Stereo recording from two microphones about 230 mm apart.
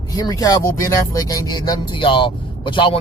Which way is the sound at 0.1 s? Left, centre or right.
Centre.